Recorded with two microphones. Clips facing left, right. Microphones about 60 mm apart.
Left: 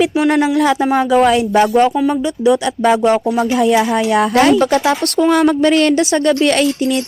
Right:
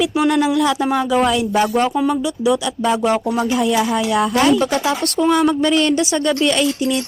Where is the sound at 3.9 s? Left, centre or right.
Left.